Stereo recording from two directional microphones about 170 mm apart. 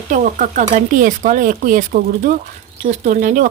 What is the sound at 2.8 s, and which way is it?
Speech, 40° right (ahead or behind).